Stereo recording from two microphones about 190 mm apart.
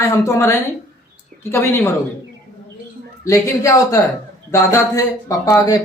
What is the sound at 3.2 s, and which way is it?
Speech, 15° left (ahead or behind).